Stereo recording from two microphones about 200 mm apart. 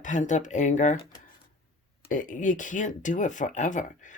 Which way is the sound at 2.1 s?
40° left (ahead or behind).